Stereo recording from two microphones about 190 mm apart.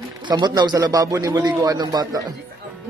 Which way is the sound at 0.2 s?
20° right (ahead or behind).